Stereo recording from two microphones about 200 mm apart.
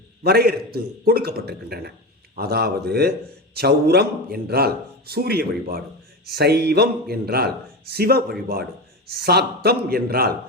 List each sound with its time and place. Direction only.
0.2 s speech: 50° right (ahead or behind)